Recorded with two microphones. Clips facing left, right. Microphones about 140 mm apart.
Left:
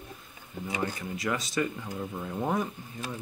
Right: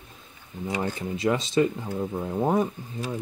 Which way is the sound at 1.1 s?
25° right (ahead or behind).